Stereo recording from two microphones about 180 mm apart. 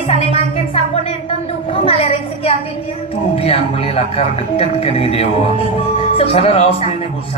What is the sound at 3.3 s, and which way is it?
Speech, 35° left (ahead or behind).